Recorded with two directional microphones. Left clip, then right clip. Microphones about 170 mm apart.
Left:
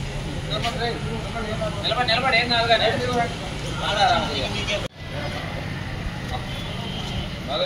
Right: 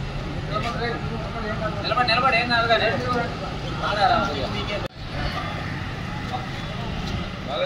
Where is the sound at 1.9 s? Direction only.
5° right (ahead or behind).